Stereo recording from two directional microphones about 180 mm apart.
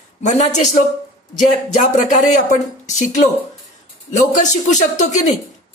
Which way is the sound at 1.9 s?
40° left (ahead or behind).